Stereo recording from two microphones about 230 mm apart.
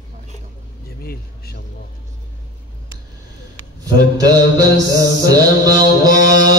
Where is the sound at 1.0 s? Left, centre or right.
Left.